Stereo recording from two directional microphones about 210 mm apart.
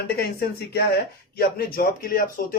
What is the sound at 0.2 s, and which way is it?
Speech, 50° left (ahead or behind).